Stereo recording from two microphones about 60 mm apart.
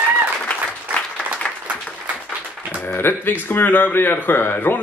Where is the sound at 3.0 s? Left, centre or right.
Left.